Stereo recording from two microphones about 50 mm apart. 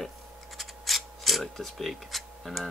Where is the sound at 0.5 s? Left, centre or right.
Centre.